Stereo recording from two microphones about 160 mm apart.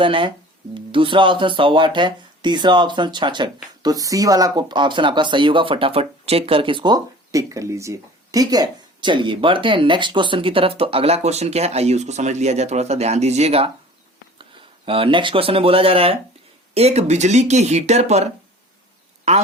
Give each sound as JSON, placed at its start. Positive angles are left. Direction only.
{"t": 0.0, "sound": "speech", "side_deg": -30}
{"t": 14.8, "sound": "speech", "side_deg": -35}